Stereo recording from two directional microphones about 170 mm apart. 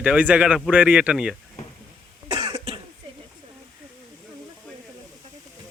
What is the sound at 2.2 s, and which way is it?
Cough, 40° right (ahead or behind).